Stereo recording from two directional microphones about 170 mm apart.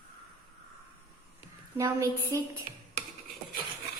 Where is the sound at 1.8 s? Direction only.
15° right (ahead or behind).